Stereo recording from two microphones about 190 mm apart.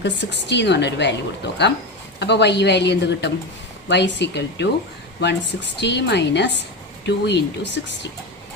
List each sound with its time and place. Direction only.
0.0 s a woman's voice: 65° left (ahead or behind)
2.1 s a woman's voice: 65° left (ahead or behind)